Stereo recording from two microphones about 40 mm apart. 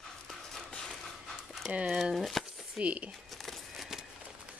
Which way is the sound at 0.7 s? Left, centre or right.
Centre.